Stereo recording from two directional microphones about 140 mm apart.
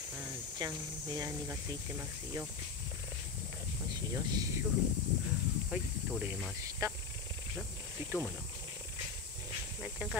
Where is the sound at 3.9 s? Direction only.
25° right (ahead or behind).